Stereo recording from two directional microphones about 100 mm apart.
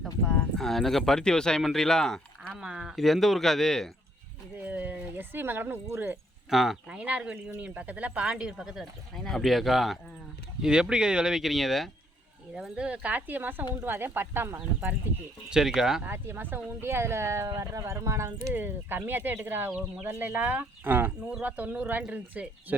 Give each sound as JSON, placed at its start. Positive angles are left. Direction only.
{"t": 0.3, "sound": "speech", "side_deg": 10}
{"t": 2.5, "sound": "speech", "side_deg": -10}
{"t": 4.6, "sound": "speech", "side_deg": -15}
{"t": 6.5, "sound": "speech", "side_deg": -5}
{"t": 15.4, "sound": "speech", "side_deg": -5}
{"t": 16.0, "sound": "speech", "side_deg": -25}